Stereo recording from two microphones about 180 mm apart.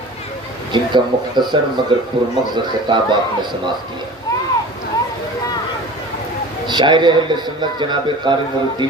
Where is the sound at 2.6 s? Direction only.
25° right (ahead or behind).